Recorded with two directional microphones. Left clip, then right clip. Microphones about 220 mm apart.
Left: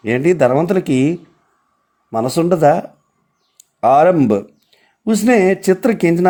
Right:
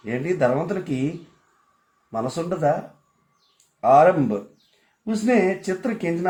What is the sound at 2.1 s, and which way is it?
Speech, 25° left (ahead or behind).